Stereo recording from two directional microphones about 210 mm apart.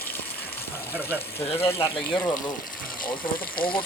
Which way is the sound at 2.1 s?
20° left (ahead or behind).